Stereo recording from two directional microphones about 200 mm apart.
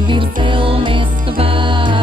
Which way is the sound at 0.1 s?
25° right (ahead or behind).